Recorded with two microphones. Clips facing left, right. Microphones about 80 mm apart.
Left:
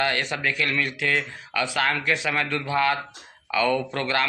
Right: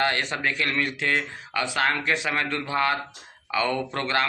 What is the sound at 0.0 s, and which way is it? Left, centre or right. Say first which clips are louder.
A man's voice: even; right.